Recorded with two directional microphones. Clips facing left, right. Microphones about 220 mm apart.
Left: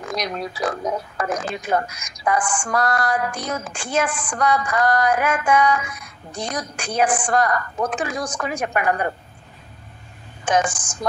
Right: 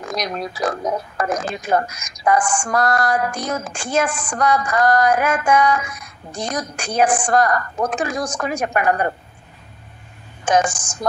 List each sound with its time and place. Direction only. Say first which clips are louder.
0.1 s speech: right 1 dB; 45° right (ahead or behind)
10.4 s speech: right 3 dB; 45° right (ahead or behind)